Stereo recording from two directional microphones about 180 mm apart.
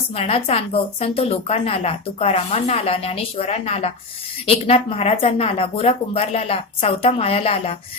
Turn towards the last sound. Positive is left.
turn(degrees=30)  # may be behind; listen again after turning